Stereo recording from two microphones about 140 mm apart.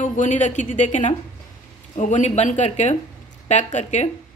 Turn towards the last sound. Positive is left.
turn(degrees=55)  # may be behind; listen again after turning